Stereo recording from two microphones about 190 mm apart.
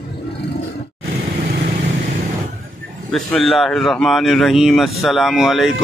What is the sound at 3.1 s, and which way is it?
Speech, centre (ahead or behind).